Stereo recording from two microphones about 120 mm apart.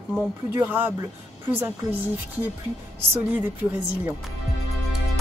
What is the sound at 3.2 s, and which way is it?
Speech, 15° right (ahead or behind).